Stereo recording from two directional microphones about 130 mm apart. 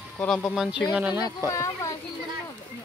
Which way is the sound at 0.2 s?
10° left (ahead or behind).